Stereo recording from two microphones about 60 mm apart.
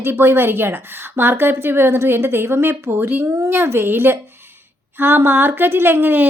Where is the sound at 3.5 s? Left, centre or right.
Right.